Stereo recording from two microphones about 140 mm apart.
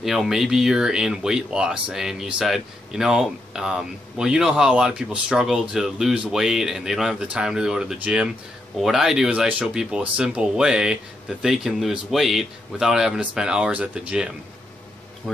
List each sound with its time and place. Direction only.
0.0 s speech: centre (ahead or behind)
15.2 s speech: 5° left (ahead or behind)